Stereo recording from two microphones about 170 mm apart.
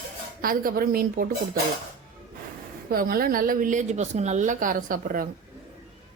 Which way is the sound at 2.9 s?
60° right (ahead or behind).